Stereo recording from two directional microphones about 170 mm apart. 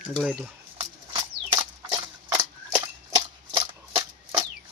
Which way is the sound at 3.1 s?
20° right (ahead or behind).